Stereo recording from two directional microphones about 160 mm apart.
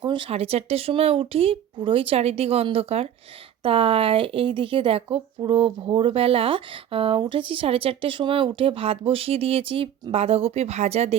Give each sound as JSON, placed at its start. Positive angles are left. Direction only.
{"t": 0.0, "sound": "a woman's voice", "side_deg": -30}